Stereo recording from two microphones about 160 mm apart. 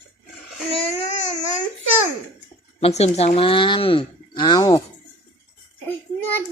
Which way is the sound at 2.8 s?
40° left (ahead or behind).